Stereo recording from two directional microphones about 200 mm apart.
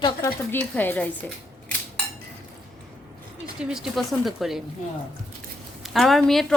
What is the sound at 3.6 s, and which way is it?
A woman's voice, centre (ahead or behind).